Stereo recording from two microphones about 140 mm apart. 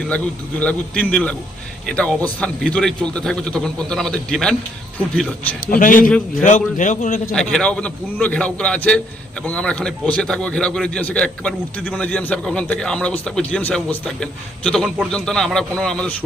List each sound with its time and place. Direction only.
0.6 s a man's voice: 10° left (ahead or behind)
5.7 s a man's voice: 75° left (ahead or behind)
6.4 s a man's voice: 65° left (ahead or behind)
7.3 s a man's voice: 5° left (ahead or behind)